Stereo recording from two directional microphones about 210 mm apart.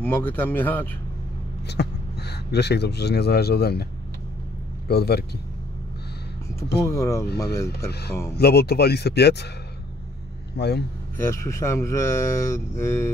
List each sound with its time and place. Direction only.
0.0 s speech: 10° left (ahead or behind)
1.7 s speech: 50° left (ahead or behind)
4.8 s speech: 50° left (ahead or behind)
6.8 s speech: 15° left (ahead or behind)
7.9 s speech: 50° left (ahead or behind)
10.6 s speech: 50° left (ahead or behind)
11.1 s speech: 15° left (ahead or behind)